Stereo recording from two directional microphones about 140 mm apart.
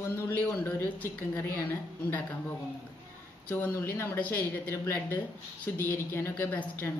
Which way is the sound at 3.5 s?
10° left (ahead or behind).